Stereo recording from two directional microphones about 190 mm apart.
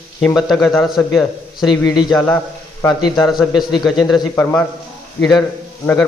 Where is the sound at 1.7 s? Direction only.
20° left (ahead or behind).